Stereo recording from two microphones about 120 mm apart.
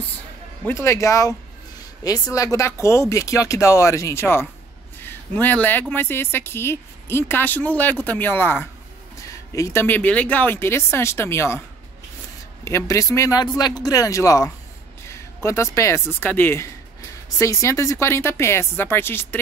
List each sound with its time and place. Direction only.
0.7 s speech: 25° left (ahead or behind)
12.6 s speech: 25° left (ahead or behind)